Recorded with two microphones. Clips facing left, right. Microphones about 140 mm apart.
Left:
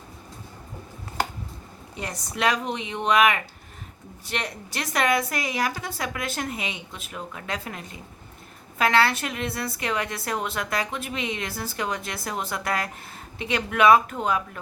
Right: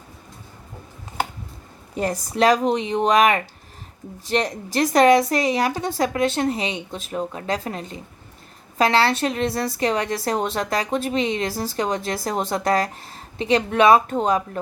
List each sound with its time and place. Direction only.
2.0 s speech: 35° right (ahead or behind)